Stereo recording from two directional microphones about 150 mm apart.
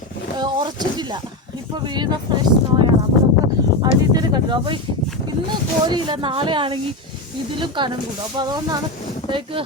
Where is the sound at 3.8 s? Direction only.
30° right (ahead or behind).